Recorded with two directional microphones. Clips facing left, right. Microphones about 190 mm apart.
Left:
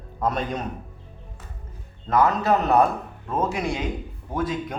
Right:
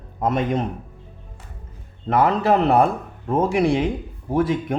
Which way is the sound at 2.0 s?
30° right (ahead or behind).